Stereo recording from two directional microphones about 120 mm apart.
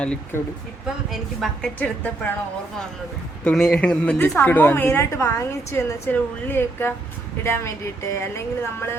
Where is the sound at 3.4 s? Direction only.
5° left (ahead or behind).